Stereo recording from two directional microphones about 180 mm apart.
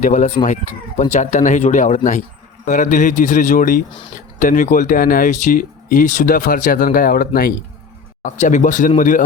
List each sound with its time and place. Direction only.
0.0 s speech: 40° left (ahead or behind)
8.2 s speech: 45° left (ahead or behind)